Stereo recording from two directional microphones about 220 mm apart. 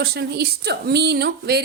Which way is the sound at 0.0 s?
45° right (ahead or behind).